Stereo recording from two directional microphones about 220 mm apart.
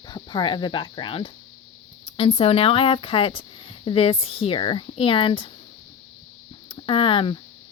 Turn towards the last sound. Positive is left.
turn(degrees=25)  # may be behind; listen again after turning